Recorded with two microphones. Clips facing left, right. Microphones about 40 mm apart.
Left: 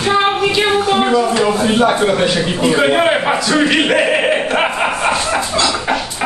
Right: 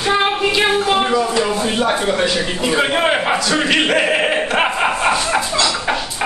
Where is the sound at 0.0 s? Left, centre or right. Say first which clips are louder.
Left 2 dB; centre.